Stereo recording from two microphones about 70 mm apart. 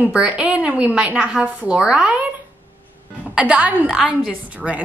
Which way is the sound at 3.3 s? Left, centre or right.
Centre.